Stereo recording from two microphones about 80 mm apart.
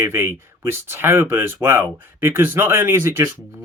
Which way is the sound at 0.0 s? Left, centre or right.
Right.